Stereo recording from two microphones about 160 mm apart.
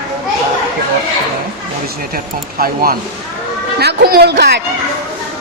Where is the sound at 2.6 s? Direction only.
65° right (ahead or behind).